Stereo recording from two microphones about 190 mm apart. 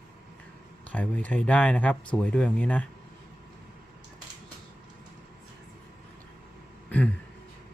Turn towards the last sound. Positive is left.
turn(degrees=5)  # may be behind; listen again after turning